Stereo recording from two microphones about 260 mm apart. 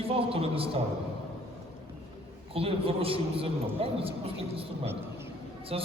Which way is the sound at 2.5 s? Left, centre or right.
Right.